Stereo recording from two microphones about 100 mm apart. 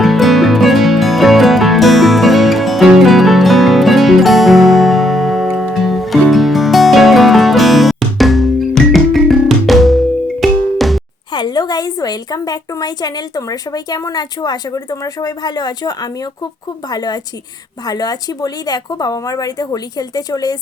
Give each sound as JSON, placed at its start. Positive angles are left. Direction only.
{"t": 0.0, "sound": "music", "side_deg": 0}
{"t": 11.3, "sound": "a woman's voice", "side_deg": 45}